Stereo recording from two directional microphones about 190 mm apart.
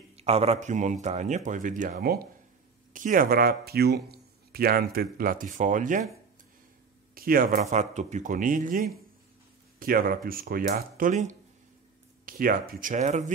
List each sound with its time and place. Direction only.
0.1 s speech: 30° right (ahead or behind)
7.2 s speech: 50° right (ahead or behind)
7.7 s speech: 40° right (ahead or behind)